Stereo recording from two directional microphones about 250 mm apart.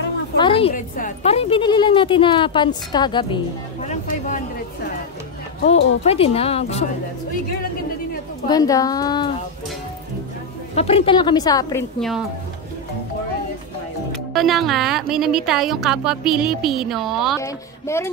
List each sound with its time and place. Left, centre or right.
0.4 s a woman's voice: left
3.8 s a sound: left
5.6 s speech: left
6.0 s a woman's voice: left
8.5 s speech: centre
10.7 s a woman's voice: left
14.1 s speech: centre
17.4 s speech: centre